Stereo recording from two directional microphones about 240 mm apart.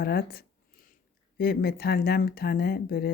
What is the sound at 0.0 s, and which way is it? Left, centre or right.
Speech, left.